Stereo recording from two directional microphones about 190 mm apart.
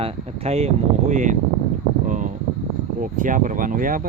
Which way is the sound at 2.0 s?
40° right (ahead or behind).